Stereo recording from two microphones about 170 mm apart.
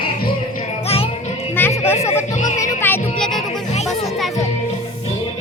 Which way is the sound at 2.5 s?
15° left (ahead or behind).